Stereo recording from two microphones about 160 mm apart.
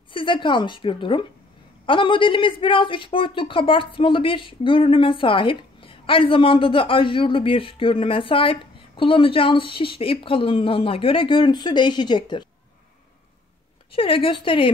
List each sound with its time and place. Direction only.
0.1 s a man's voice: 30° left (ahead or behind)
13.9 s a man's voice: 35° left (ahead or behind)